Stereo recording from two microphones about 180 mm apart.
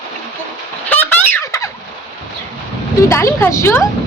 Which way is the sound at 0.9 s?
10° left (ahead or behind).